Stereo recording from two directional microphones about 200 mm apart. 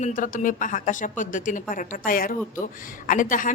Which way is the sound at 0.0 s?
40° left (ahead or behind).